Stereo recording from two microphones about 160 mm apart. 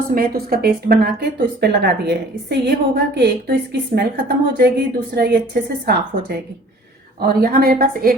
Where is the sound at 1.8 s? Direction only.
90° right.